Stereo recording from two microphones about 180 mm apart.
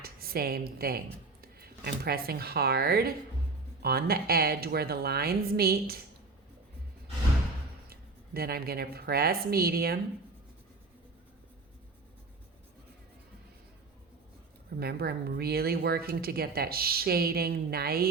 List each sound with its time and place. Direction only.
0.0 s a woman's voice: 55° right (ahead or behind)
7.9 s speech: 60° right (ahead or behind)
14.8 s a woman's voice: 60° right (ahead or behind)